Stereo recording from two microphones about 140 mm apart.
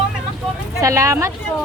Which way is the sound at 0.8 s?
20° right (ahead or behind).